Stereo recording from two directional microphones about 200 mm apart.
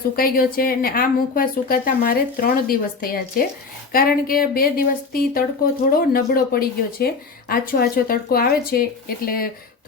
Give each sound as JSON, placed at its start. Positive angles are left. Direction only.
{"t": 0.2, "sound": "a woman's voice", "side_deg": 45}